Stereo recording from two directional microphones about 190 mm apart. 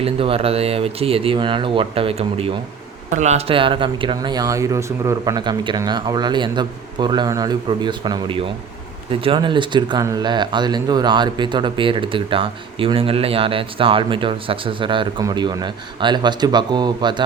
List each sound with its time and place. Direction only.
0.0 s speech: 30° right (ahead or behind)